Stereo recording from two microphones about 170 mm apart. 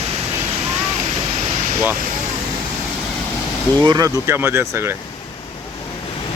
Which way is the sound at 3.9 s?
20° right (ahead or behind).